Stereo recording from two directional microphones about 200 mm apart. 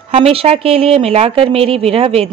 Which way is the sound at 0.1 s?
30° right (ahead or behind).